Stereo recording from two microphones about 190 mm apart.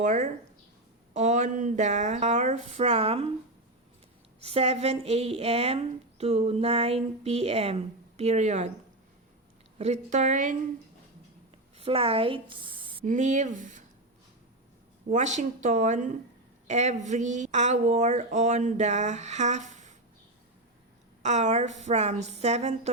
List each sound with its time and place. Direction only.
0.0 s a woman's voice: 40° right (ahead or behind)
4.4 s a woman's voice: 30° right (ahead or behind)
9.7 s a woman's voice: 35° right (ahead or behind)
11.8 s speech: 30° right (ahead or behind)
13.1 s a woman's voice: 40° right (ahead or behind)
15.1 s a woman's voice: 40° right (ahead or behind)
21.2 s a woman's voice: 40° right (ahead or behind)